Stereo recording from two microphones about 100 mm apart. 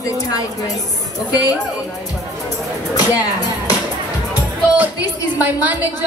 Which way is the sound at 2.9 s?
40° left (ahead or behind).